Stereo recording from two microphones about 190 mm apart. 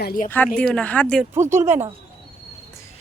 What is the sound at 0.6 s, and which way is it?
Speech, 5° left (ahead or behind).